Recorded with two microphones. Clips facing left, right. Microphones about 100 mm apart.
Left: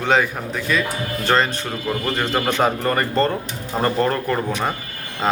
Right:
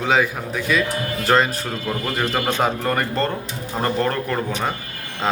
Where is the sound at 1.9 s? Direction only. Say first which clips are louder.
Left 1 dB; centre (ahead or behind).